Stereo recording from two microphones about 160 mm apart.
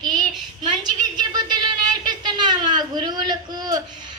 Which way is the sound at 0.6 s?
25° right (ahead or behind).